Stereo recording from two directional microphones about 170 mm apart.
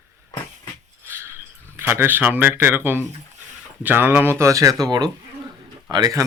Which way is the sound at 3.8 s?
10° right (ahead or behind).